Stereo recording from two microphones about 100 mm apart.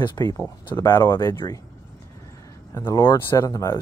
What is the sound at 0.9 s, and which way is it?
Speech, 20° left (ahead or behind).